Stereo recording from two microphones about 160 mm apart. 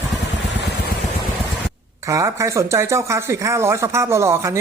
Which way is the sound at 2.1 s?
20° right (ahead or behind).